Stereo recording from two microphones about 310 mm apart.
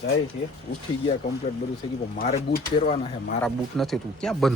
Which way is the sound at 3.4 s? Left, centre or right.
Centre.